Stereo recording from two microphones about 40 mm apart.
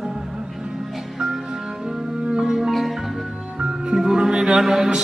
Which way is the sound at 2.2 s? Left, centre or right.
Centre.